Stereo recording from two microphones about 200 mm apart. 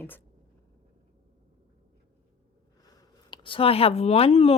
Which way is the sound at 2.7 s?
20° left (ahead or behind).